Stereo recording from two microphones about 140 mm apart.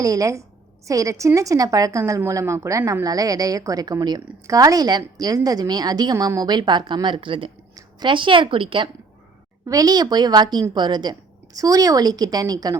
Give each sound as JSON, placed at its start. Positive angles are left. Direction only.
{"t": 0.0, "sound": "a woman's voice", "side_deg": -25}
{"t": 9.6, "sound": "a woman's voice", "side_deg": -25}